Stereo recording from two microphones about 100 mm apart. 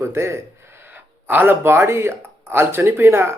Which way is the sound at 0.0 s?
25° right (ahead or behind).